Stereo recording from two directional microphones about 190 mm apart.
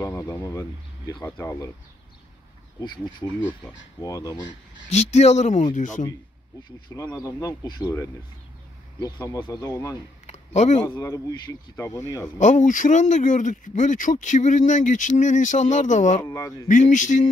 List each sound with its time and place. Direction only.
0.0 s speech: 15° left (ahead or behind)
3.3 s speech: 10° left (ahead or behind)
4.9 s speech: 35° left (ahead or behind)
7.2 s speech: 20° left (ahead or behind)
10.2 s a sound: 35° left (ahead or behind)
11.0 s speech: 15° left (ahead or behind)
12.4 s speech: 40° left (ahead or behind)
16.2 s speech: 15° left (ahead or behind)
16.6 s speech: 40° left (ahead or behind)